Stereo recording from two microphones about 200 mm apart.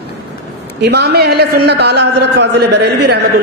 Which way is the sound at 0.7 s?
55° right (ahead or behind).